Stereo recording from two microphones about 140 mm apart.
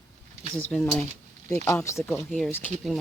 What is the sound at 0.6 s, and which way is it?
Speech, 10° left (ahead or behind).